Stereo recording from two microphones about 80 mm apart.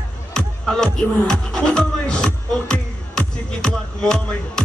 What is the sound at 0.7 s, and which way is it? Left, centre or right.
Music, centre.